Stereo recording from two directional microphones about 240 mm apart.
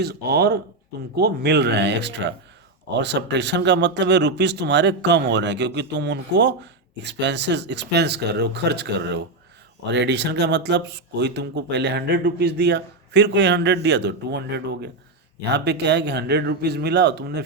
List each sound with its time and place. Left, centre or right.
0.0 s speech: right